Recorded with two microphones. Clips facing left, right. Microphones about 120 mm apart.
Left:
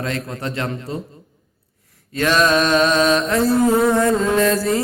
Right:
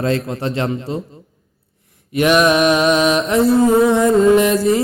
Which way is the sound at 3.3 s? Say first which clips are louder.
Right 3 dB; 20° right (ahead or behind).